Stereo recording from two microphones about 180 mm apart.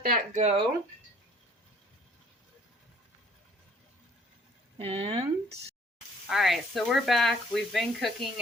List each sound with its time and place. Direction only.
0.0 s speech: 45° right (ahead or behind)
4.8 s speech: 30° right (ahead or behind)
6.2 s speech: centre (ahead or behind)